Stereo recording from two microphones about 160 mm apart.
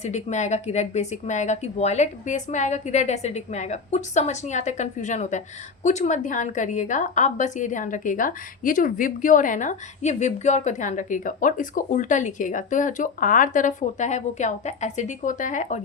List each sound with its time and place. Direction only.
0.0 s a woman's voice: 45° left (ahead or behind)